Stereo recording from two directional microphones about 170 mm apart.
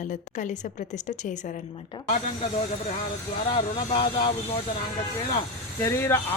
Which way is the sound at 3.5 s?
35° left (ahead or behind).